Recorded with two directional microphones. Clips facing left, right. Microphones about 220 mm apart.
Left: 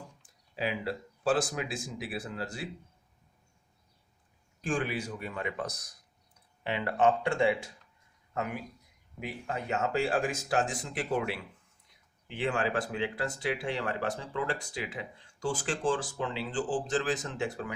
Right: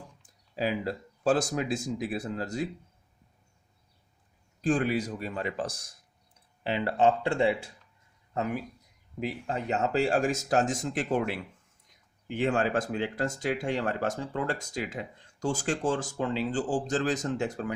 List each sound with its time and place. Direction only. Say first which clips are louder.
0.5 s speech: right 3 dB; 40° right (ahead or behind)
4.6 s speech: right 6 dB; 35° right (ahead or behind)
9.2 s speech: right 4 dB; 35° right (ahead or behind)
12.3 s speech: right 4 dB; 45° right (ahead or behind)